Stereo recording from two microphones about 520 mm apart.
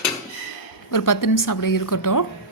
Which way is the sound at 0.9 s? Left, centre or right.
Left.